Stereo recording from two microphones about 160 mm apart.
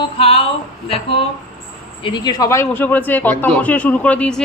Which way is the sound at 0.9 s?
35° left (ahead or behind).